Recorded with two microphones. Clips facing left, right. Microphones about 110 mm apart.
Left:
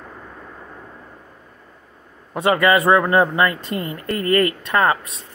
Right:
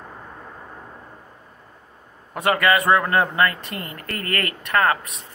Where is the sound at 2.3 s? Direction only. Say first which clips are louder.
Left 3 dB; 25° left (ahead or behind).